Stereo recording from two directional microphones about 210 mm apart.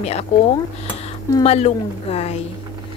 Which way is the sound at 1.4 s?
30° left (ahead or behind).